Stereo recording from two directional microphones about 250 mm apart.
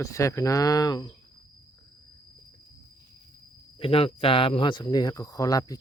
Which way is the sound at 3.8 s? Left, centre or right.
Left.